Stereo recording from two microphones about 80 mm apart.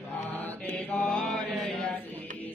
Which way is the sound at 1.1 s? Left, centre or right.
Centre.